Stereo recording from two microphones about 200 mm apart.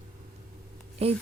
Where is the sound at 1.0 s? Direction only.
30° right (ahead or behind).